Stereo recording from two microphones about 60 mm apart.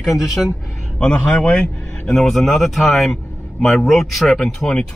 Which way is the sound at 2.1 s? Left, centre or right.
Centre.